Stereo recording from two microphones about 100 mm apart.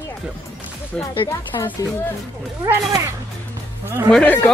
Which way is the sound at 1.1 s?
55° left (ahead or behind).